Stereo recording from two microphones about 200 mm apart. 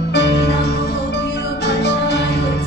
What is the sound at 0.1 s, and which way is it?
Music, 60° left (ahead or behind).